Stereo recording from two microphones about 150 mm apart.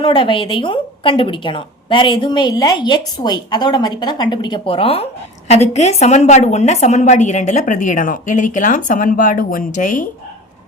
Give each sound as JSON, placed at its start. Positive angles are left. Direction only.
{"t": 0.0, "sound": "a woman's voice", "side_deg": 35}